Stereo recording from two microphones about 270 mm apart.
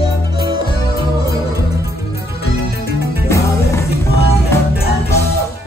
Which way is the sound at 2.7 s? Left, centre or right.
Right.